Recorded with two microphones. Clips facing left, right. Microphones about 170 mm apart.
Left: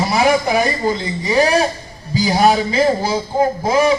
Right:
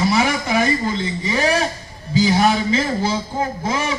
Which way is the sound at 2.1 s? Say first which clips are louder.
Left 2 dB; 40° left (ahead or behind).